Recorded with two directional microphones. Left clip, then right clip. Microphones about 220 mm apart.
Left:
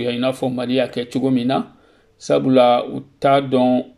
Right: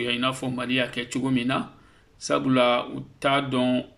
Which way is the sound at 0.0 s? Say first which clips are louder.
Left 6 dB; 20° left (ahead or behind).